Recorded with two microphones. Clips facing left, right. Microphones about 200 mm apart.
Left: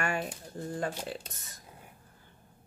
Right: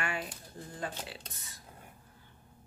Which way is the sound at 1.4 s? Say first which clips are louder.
Left 1 dB; 45° left (ahead or behind).